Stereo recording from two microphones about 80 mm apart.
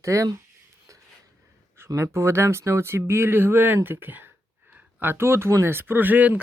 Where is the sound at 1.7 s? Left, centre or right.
Right.